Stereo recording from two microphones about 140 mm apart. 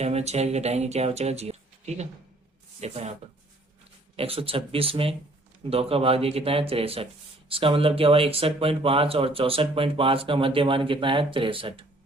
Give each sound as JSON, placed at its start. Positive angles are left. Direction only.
{"t": 0.0, "sound": "speech", "side_deg": -50}
{"t": 4.2, "sound": "speech", "side_deg": -45}